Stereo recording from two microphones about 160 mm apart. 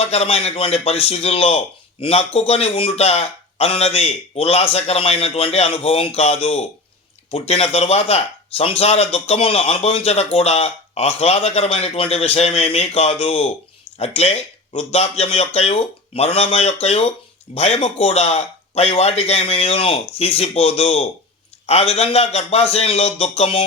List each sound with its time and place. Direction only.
0.0 s a man's voice: 40° left (ahead or behind)